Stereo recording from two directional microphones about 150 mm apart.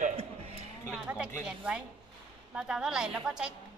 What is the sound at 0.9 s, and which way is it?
A woman's voice, 5° right (ahead or behind).